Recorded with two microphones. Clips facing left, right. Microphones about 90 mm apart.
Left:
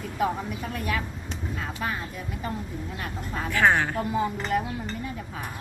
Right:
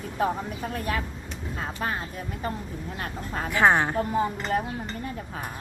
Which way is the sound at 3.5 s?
20° right (ahead or behind).